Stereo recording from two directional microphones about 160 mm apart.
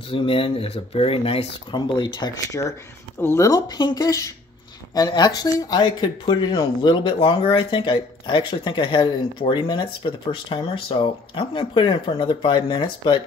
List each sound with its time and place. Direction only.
0.1 s speech: 35° left (ahead or behind)